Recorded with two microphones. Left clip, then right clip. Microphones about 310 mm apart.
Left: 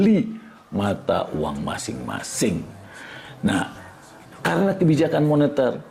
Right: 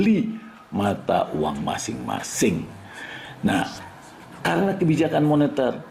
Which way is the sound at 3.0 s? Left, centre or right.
Left.